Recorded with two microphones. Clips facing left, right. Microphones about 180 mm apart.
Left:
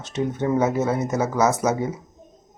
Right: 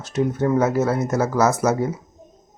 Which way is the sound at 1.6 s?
5° right (ahead or behind).